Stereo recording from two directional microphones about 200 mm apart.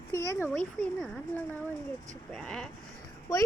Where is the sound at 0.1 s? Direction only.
15° left (ahead or behind).